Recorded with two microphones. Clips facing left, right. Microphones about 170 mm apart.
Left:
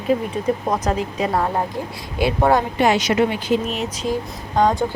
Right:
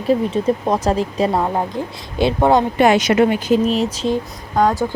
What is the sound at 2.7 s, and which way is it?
Speech, 55° right (ahead or behind).